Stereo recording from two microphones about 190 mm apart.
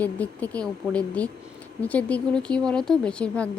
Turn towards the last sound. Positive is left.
turn(degrees=5)  # may be behind; listen again after turning